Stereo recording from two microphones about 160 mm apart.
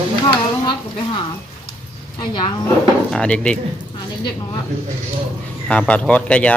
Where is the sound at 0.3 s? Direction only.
30° left (ahead or behind).